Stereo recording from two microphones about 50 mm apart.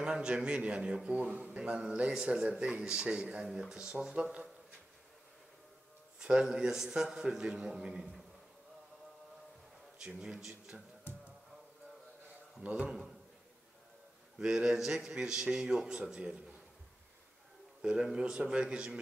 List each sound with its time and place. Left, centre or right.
0.0 s a man's voice: right
3.4 s a man's voice: centre
6.1 s a man's voice: centre
9.9 s a man's voice: centre
12.6 s speech: right
14.4 s a man's voice: centre
17.8 s speech: centre